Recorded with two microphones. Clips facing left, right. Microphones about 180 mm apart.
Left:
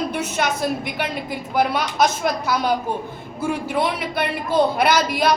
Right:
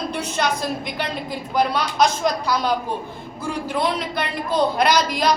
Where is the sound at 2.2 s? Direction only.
5° left (ahead or behind).